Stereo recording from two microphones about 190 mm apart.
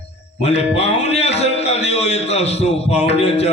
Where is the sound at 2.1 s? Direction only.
35° left (ahead or behind).